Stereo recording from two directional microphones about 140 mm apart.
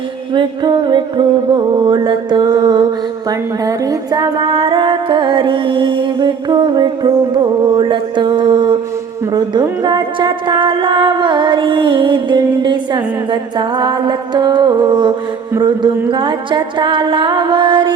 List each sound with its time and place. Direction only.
0.3 s speech: 30° right (ahead or behind)